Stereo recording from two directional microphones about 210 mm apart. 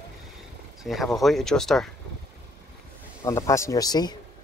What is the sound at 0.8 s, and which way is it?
Speech, centre (ahead or behind).